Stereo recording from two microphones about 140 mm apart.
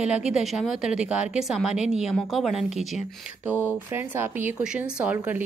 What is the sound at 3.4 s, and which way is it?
Speech, 15° right (ahead or behind).